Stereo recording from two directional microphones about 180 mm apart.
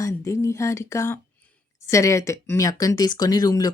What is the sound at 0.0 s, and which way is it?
A woman's voice, 15° left (ahead or behind).